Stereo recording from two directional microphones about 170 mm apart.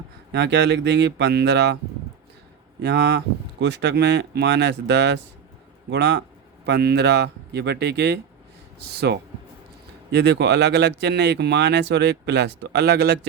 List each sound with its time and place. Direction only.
0.3 s speech: 90° right
2.8 s speech: 90° right
10.1 s speech: 85° right